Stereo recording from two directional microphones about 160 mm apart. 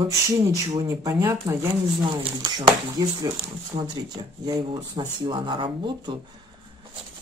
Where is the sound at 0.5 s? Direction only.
20° right (ahead or behind).